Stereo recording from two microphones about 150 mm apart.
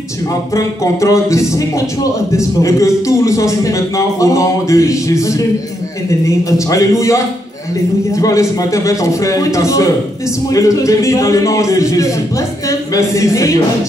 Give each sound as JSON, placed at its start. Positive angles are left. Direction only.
{"t": 0.6, "sound": "a man's voice", "side_deg": 20}